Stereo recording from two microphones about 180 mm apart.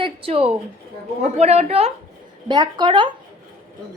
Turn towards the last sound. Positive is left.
turn(degrees=-25)  # may be behind; listen again after turning